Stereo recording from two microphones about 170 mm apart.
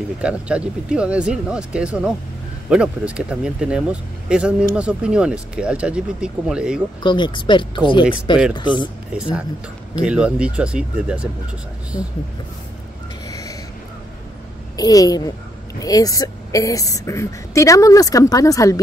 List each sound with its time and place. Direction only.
0.2 s speech: 5° right (ahead or behind)
7.0 s a woman's voice: 25° left (ahead or behind)
9.1 s speech: 5° right (ahead or behind)
11.9 s a woman's voice: 25° left (ahead or behind)
13.3 s a sound: 20° left (ahead or behind)
14.8 s a woman's voice: 20° left (ahead or behind)